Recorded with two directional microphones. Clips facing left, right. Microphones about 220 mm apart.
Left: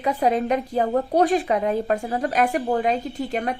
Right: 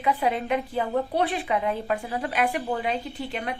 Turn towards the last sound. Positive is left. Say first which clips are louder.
# left 6 dB
turn(degrees=45)  # may be behind; listen again after turning